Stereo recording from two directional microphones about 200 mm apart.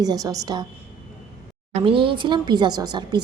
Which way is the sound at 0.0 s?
20° right (ahead or behind).